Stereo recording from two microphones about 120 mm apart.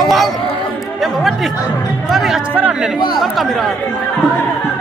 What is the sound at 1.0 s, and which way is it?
Music, centre (ahead or behind).